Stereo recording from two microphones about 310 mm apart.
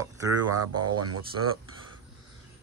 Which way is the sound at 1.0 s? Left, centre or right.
Right.